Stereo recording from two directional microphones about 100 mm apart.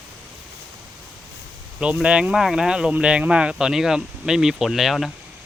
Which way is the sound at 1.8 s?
10° right (ahead or behind).